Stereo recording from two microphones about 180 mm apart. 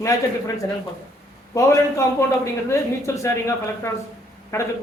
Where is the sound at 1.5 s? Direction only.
20° left (ahead or behind).